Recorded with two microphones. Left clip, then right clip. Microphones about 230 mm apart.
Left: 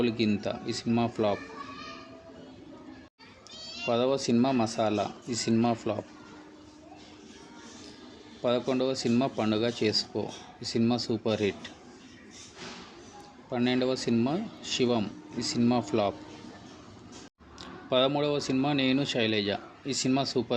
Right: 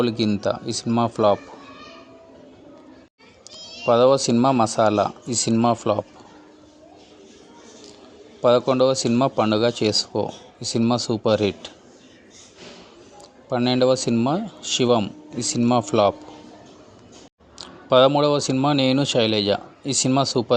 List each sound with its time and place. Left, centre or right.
0.0 s speech: right
3.8 s speech: right
8.4 s speech: right
13.5 s speech: right
17.6 s speech: right